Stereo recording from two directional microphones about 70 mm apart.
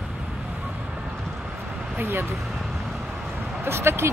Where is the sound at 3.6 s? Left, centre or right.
Right.